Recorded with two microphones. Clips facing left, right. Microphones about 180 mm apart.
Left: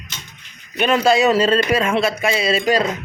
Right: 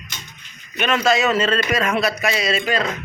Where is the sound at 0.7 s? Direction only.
30° left (ahead or behind).